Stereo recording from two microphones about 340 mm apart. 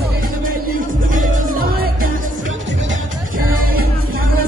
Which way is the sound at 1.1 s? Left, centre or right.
Right.